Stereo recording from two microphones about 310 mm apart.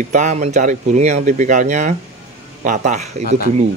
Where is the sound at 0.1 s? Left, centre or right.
Right.